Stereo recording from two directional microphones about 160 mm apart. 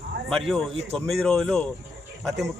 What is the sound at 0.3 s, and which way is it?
Speech, centre (ahead or behind).